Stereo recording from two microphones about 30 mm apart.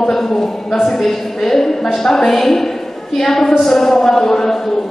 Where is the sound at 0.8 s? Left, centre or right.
Centre.